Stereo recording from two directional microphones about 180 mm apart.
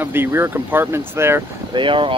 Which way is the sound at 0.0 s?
10° right (ahead or behind).